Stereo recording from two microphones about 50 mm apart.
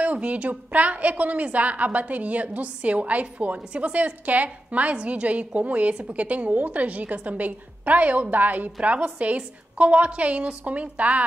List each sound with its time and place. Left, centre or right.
0.0 s a woman's voice: right